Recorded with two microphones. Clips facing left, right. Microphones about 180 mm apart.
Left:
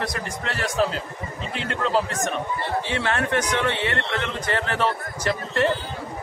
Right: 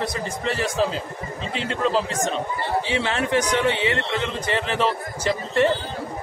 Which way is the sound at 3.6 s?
15° right (ahead or behind).